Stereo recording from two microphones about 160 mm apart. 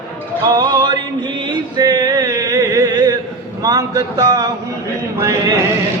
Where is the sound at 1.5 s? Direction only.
25° right (ahead or behind).